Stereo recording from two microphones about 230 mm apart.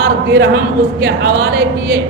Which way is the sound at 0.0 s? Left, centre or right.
Right.